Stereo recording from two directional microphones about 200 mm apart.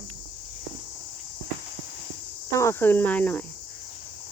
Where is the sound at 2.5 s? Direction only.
10° left (ahead or behind).